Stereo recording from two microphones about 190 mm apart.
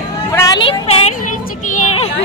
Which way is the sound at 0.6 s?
30° left (ahead or behind).